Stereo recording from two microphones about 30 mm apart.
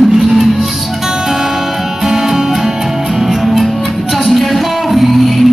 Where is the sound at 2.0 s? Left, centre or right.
Centre.